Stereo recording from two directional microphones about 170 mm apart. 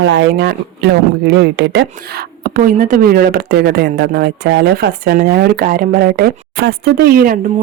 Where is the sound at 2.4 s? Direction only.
55° right (ahead or behind).